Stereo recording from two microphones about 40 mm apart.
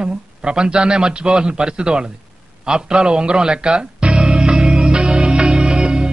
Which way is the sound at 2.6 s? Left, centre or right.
Right.